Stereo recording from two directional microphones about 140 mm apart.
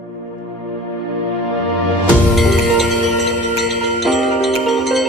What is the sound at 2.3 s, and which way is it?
Music, centre (ahead or behind).